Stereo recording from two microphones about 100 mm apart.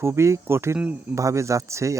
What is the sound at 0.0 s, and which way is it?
Speech, 25° right (ahead or behind).